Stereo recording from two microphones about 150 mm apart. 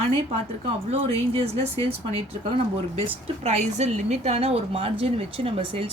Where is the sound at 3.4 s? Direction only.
50° right (ahead or behind).